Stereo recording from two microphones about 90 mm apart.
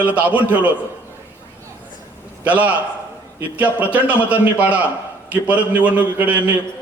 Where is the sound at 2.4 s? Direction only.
15° right (ahead or behind).